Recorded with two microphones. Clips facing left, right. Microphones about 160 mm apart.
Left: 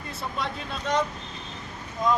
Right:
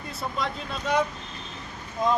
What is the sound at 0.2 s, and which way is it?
Speech, centre (ahead or behind).